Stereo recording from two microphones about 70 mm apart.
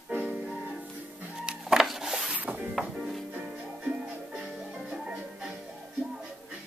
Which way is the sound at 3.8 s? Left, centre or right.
Centre.